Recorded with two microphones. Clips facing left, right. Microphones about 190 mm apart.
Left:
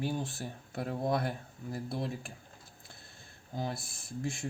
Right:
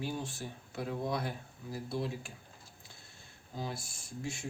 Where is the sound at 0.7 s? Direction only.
50° left (ahead or behind).